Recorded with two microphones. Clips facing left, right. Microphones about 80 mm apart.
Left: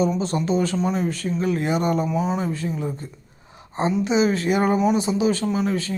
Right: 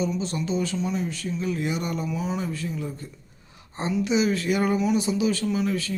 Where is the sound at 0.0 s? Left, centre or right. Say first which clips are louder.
Left 5 dB; left.